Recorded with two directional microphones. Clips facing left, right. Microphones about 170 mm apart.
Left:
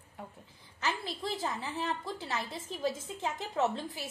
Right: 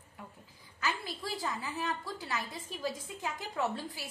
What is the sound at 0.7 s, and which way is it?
A woman's voice, 25° left (ahead or behind).